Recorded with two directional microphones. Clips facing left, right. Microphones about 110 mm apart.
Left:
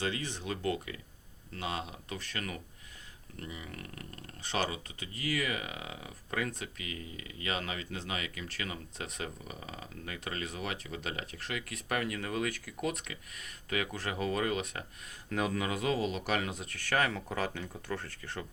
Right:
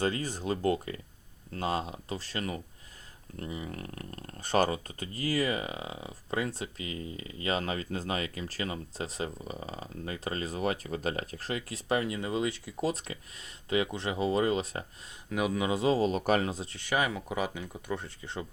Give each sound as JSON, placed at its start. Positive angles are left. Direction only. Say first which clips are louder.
{"t": 0.0, "sound": "speech", "louder": "right 5 dB", "side_deg": -40}
{"t": 15.3, "sound": "speech", "louder": "right 3 dB", "side_deg": -10}
{"t": 15.7, "sound": "speech", "louder": "right 5 dB", "side_deg": -30}
{"t": 16.7, "sound": "speech", "louder": "even", "side_deg": -15}